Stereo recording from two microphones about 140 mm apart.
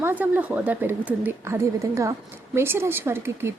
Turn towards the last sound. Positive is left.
turn(degrees=-15)  # may be behind; listen again after turning